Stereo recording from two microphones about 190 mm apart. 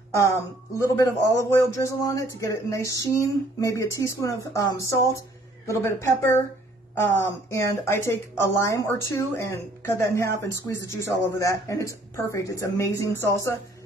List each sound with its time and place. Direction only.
0.7 s speech: 15° left (ahead or behind)